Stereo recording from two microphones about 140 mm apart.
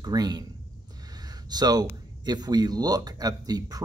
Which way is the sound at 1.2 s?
30° right (ahead or behind).